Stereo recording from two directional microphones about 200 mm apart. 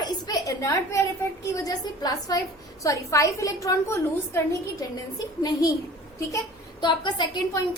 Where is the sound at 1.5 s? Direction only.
20° left (ahead or behind).